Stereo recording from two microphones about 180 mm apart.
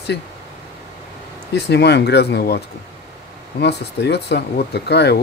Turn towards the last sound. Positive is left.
turn(degrees=65)  # may be behind; listen again after turning